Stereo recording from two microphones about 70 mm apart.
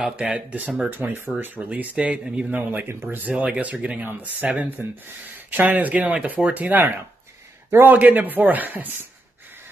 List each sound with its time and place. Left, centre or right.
0.0 s speech: centre
0.8 s speech: right